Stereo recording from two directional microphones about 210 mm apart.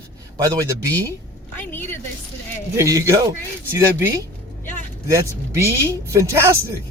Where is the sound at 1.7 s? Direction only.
10° left (ahead or behind).